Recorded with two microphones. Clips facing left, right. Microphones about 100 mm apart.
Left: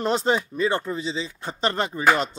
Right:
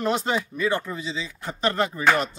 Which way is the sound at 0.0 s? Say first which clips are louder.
Left 2 dB; 30° left (ahead or behind).